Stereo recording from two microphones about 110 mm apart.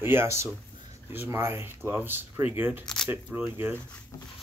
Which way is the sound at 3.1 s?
15° right (ahead or behind).